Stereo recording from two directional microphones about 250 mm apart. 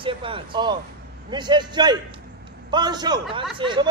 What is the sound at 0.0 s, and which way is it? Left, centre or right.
A man's voice, right.